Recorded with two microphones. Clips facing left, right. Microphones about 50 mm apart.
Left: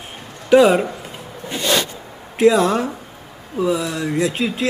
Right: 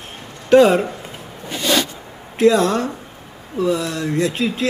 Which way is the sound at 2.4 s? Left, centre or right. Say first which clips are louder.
Even; centre.